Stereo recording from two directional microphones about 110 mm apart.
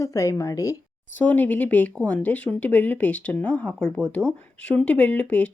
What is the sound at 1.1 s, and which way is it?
Speech, 15° left (ahead or behind).